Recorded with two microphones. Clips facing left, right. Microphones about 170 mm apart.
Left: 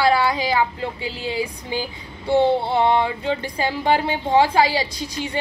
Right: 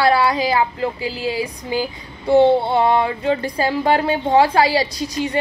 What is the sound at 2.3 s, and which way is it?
Child singing, 45° right (ahead or behind).